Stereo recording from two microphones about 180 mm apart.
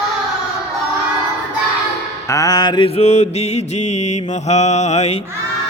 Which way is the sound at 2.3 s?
20° left (ahead or behind).